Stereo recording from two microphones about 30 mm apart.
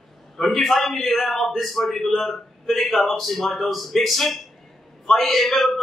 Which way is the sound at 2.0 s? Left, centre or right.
Centre.